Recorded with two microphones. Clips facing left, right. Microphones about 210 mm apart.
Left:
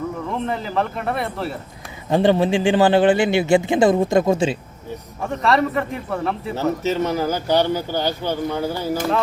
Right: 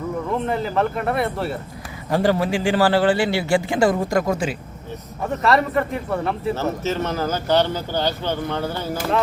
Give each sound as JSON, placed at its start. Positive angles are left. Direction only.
{"t": 0.3, "sound": "a man's voice", "side_deg": 0}
{"t": 2.0, "sound": "a man's voice", "side_deg": 20}
{"t": 5.2, "sound": "a man's voice", "side_deg": 0}
{"t": 6.6, "sound": "speech", "side_deg": 15}